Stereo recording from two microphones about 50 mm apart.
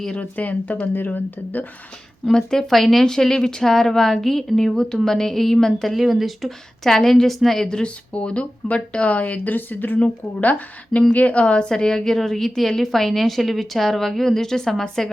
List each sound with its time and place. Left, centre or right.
0.2 s speech: left
2.3 s a woman's voice: centre
5.9 s a woman's voice: centre
7.8 s a woman's voice: left; by 15.1 s centre